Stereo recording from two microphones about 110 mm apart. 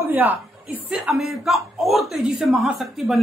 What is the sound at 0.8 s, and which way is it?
A man's voice, 5° right (ahead or behind).